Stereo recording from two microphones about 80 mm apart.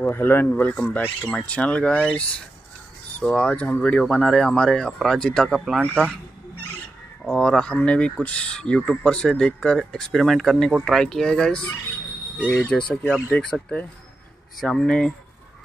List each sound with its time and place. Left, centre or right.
0.0 s speech: left; by 5.8 s centre
7.2 s speech: centre